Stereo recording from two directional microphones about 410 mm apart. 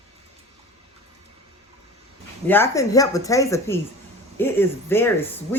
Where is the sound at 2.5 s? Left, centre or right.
Centre.